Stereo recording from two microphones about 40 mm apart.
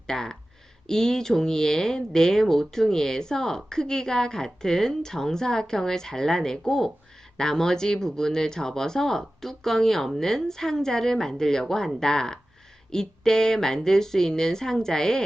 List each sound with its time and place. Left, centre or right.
0.1 s speech: centre